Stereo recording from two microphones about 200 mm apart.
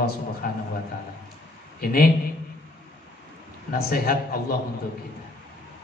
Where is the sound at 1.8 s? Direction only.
50° left (ahead or behind).